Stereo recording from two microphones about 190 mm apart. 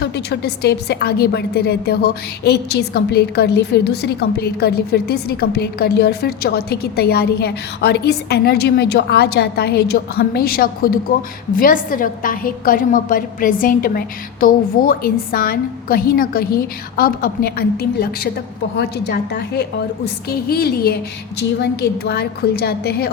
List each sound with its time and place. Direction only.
0.0 s a woman's voice: 60° left (ahead or behind)